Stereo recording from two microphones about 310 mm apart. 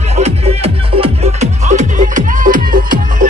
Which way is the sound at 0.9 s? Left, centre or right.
Centre.